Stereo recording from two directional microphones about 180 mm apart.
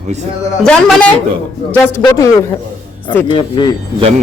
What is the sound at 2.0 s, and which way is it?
Speech, 20° left (ahead or behind).